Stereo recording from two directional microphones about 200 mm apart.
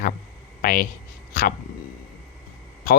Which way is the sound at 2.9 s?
45° left (ahead or behind).